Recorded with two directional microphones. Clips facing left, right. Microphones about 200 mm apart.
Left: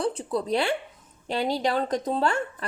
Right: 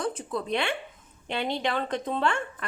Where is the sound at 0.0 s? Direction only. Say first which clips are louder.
Left 4 dB; 35° left (ahead or behind).